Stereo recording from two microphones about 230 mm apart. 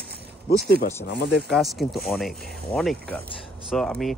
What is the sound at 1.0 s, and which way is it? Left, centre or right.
Speech, left.